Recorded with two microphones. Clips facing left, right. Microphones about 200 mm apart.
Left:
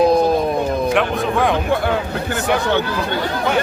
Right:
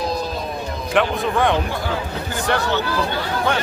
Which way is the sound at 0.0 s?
55° left (ahead or behind).